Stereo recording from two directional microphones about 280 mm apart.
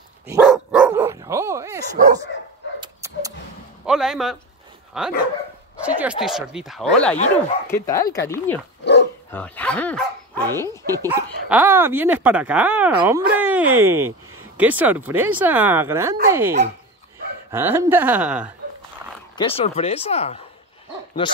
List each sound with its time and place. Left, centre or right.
0.3 s dog: centre
3.8 s speech: centre
10.9 s speech: centre
13.3 s a sound: centre
13.7 s a woman's voice: centre
19.3 s speech: centre